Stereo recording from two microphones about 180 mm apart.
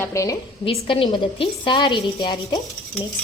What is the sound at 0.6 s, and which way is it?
A woman's voice, 30° left (ahead or behind).